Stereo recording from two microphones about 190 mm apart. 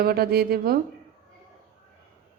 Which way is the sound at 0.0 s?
55° right (ahead or behind).